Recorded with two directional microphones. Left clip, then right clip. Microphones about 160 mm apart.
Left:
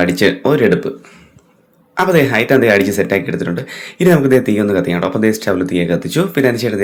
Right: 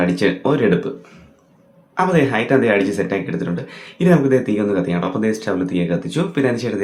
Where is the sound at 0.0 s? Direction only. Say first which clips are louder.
Left 5 dB; 15° left (ahead or behind).